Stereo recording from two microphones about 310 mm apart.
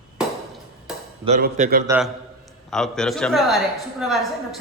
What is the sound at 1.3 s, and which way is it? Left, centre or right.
Speech, right.